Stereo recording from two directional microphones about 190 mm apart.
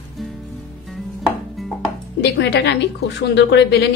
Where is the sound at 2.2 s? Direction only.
65° left (ahead or behind).